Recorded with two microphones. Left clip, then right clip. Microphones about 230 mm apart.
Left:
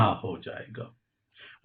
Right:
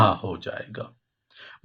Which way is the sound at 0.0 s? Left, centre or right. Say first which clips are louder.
Right 5 dB; right.